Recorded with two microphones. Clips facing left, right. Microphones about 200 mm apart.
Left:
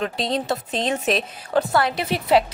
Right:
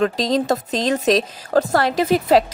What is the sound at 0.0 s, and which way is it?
Speech, 40° right (ahead or behind).